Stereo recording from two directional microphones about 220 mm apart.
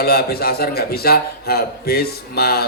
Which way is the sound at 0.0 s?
45° left (ahead or behind).